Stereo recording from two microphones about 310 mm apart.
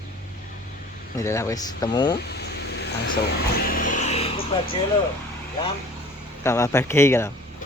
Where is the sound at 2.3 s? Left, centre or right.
Left.